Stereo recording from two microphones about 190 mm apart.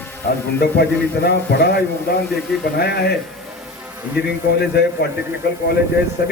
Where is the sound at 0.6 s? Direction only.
60° left (ahead or behind).